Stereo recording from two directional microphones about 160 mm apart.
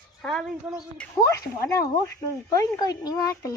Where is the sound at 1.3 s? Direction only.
20° left (ahead or behind).